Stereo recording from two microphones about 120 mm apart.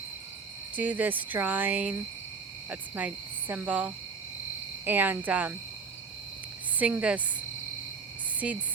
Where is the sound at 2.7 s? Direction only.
15° right (ahead or behind).